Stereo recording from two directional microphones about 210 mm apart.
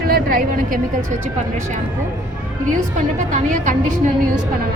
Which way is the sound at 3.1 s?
35° right (ahead or behind).